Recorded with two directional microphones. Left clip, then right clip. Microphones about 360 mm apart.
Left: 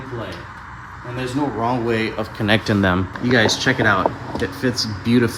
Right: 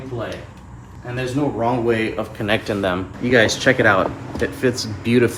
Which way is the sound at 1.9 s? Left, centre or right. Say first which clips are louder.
Right 1 dB; left.